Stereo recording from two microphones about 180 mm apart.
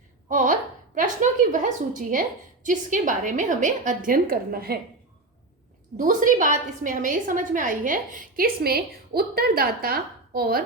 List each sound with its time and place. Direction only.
0.3 s a sound: 45° right (ahead or behind)
0.9 s a woman's voice: 45° right (ahead or behind)
6.0 s a woman's voice: 45° right (ahead or behind)